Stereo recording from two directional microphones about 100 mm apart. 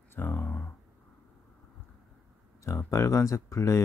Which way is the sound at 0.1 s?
20° left (ahead or behind).